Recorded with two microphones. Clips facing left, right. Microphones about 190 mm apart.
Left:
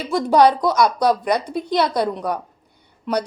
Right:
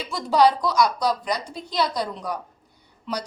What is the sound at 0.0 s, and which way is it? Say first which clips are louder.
A woman's voice: left 4 dB; 50° left (ahead or behind).